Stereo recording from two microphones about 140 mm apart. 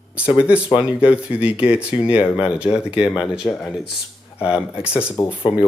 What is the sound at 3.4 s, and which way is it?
Speech, centre (ahead or behind).